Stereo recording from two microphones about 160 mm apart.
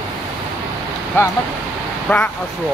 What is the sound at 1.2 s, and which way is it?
Speech, 15° left (ahead or behind).